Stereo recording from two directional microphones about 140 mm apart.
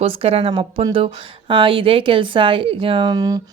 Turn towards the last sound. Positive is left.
turn(degrees=-30)  # may be behind; listen again after turning